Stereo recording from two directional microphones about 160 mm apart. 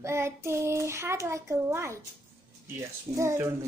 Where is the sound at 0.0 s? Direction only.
15° right (ahead or behind).